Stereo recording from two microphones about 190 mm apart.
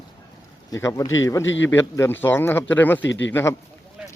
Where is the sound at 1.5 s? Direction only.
80° left.